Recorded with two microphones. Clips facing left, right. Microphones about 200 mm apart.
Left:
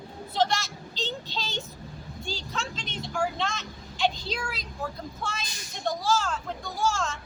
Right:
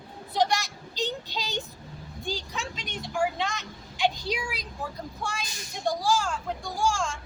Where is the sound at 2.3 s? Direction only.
15° right (ahead or behind).